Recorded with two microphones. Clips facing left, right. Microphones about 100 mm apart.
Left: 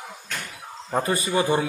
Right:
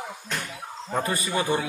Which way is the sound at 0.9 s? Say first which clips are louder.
Left 3 dB; 25° left (ahead or behind).